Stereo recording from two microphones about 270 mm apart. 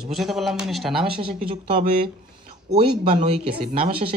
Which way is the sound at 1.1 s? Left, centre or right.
Centre.